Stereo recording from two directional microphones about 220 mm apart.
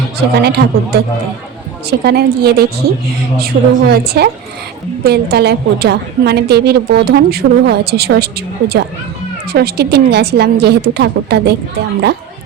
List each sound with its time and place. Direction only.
0.2 s a woman's voice: 45° right (ahead or behind)